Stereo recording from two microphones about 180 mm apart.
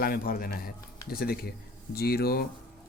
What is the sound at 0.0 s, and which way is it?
Speech, 55° left (ahead or behind).